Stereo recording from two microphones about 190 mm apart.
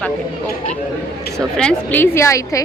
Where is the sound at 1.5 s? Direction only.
5° left (ahead or behind).